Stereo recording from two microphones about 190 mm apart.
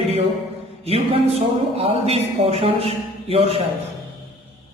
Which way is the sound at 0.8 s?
30° right (ahead or behind).